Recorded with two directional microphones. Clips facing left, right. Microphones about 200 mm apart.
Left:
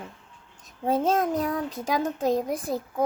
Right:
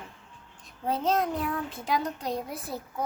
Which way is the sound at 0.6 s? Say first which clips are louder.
Left 5 dB; 50° left (ahead or behind).